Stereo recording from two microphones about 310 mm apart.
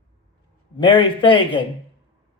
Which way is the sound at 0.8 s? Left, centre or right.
Centre.